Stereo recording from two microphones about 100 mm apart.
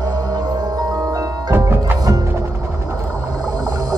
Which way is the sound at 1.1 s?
30° right (ahead or behind).